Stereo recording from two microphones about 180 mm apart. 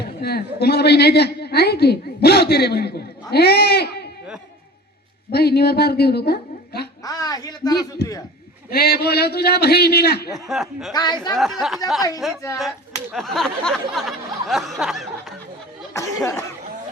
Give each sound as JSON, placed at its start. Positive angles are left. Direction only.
{"t": 0.0, "sound": "a woman's voice", "side_deg": 60}
{"t": 5.3, "sound": "a woman's voice", "side_deg": 65}
{"t": 7.0, "sound": "a man's voice", "side_deg": 20}
{"t": 8.7, "sound": "a woman's voice", "side_deg": 60}
{"t": 10.3, "sound": "a sound", "side_deg": 0}
{"t": 10.9, "sound": "speech", "side_deg": 25}
{"t": 11.3, "sound": "a sound", "side_deg": 0}
{"t": 15.9, "sound": "speech", "side_deg": 15}